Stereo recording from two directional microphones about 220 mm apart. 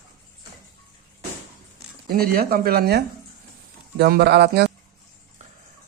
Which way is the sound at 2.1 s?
45° right (ahead or behind).